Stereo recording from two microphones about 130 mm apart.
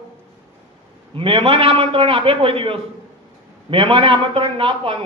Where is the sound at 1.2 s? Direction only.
45° right (ahead or behind).